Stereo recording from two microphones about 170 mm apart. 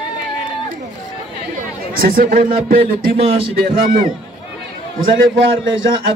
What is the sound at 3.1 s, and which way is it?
Speech, 35° right (ahead or behind).